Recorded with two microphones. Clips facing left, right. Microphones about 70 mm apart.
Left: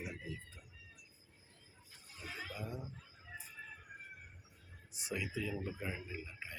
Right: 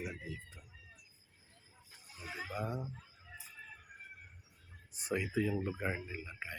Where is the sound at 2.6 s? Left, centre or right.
Right.